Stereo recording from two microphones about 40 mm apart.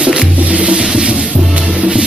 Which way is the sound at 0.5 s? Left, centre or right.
Right.